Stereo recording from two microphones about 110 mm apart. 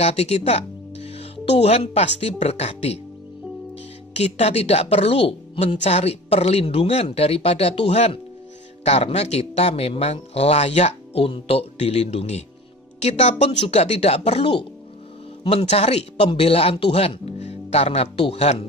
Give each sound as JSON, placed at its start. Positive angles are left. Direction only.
{"t": 0.0, "sound": "speech", "side_deg": 70}
{"t": 4.1, "sound": "speech", "side_deg": 70}
{"t": 13.0, "sound": "speech", "side_deg": 85}